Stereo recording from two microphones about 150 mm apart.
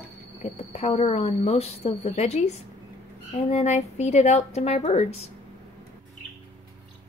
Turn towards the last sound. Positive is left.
turn(degrees=45)  # may be behind; listen again after turning